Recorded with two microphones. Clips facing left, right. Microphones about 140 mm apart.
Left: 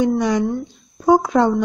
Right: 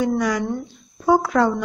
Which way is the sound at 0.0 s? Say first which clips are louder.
Left 3 dB; 25° left (ahead or behind).